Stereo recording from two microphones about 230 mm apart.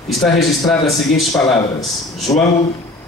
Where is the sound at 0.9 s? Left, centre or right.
Centre.